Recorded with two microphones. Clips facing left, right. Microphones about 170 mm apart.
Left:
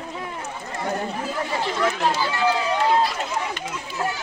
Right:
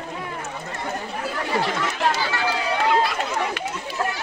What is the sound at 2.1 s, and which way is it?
Run, 75° right (ahead or behind).